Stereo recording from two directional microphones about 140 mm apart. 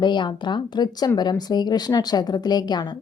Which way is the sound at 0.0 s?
35° left (ahead or behind).